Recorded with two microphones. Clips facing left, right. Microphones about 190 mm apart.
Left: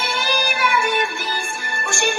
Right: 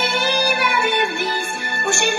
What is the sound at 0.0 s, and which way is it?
Music, 60° right (ahead or behind).